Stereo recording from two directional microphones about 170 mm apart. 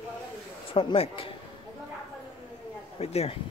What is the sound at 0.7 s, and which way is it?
Speech, 35° left (ahead or behind).